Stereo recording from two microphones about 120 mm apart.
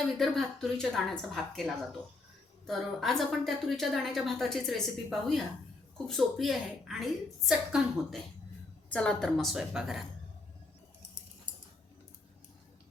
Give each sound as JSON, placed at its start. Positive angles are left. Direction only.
{"t": 0.2, "sound": "a woman's voice", "side_deg": 0}